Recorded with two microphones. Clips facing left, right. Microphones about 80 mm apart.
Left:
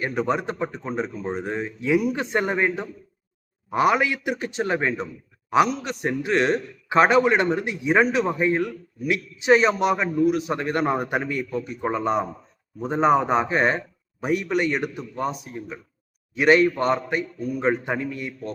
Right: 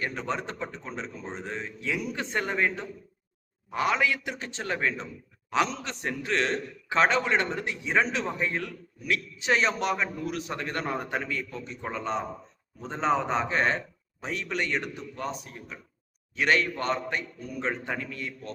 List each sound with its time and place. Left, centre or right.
0.0 s a man's voice: centre
10.6 s a man's voice: left
16.8 s a man's voice: centre